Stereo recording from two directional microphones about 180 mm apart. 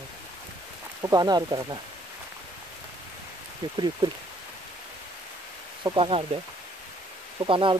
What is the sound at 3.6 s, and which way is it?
Speech, 25° right (ahead or behind).